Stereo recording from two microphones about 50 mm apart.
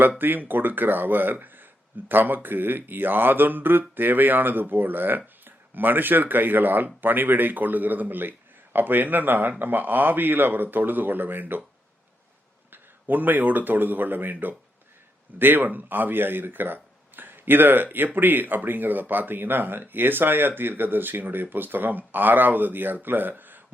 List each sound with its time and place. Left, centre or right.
0.2 s speech: right
12.7 s speech: right